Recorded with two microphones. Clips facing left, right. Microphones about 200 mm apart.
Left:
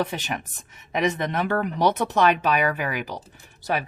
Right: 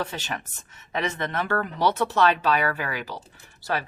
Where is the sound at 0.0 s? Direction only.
15° left (ahead or behind).